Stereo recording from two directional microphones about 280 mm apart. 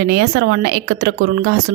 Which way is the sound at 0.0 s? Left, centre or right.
Right.